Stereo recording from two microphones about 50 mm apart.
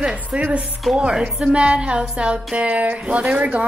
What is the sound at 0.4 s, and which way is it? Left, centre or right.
A woman's voice, right.